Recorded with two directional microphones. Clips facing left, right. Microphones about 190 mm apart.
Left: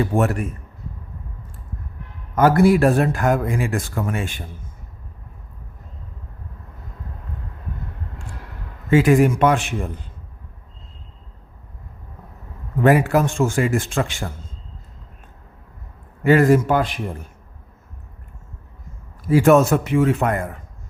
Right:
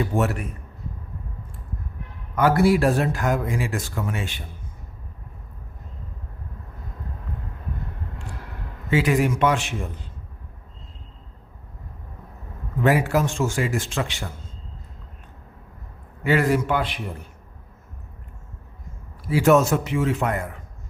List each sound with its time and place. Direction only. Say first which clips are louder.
0.2 s speech: left 2 dB; 50° left (ahead or behind)
2.3 s speech: left 4 dB; 45° left (ahead or behind)
8.9 s speech: left 6 dB; 50° left (ahead or behind)
12.8 s speech: left 4 dB; 55° left (ahead or behind)
16.2 s speech: left 6 dB; 45° left (ahead or behind)
19.2 s a man's voice: left 4 dB; 50° left (ahead or behind)